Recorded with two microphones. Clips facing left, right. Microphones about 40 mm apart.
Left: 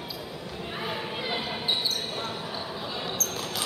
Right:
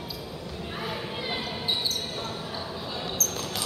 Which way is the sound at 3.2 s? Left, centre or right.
Centre.